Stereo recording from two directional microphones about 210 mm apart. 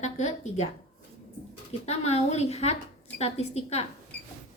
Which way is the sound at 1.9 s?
30° left (ahead or behind).